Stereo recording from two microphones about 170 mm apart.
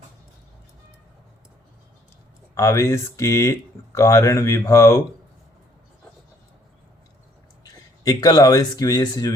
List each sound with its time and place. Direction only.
2.6 s speech: 20° left (ahead or behind)
7.6 s speech: 20° left (ahead or behind)